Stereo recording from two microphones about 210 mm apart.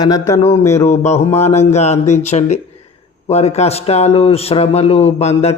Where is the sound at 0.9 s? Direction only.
30° left (ahead or behind).